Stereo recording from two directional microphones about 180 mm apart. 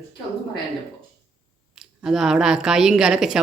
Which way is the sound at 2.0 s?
5° right (ahead or behind).